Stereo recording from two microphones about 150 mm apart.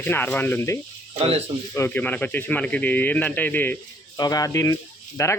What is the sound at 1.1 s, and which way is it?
Speech, 40° right (ahead or behind).